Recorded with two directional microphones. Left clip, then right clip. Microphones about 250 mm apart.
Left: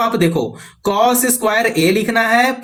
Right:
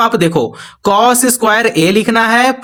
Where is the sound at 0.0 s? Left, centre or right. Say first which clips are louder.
Right 5 dB; right.